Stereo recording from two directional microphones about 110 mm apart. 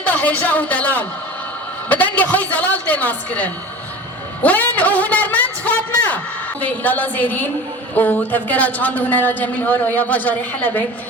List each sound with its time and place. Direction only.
0.0 s a woman's voice: 15° left (ahead or behind)
4.4 s a sound: 15° left (ahead or behind)
6.6 s a woman's voice: 15° left (ahead or behind)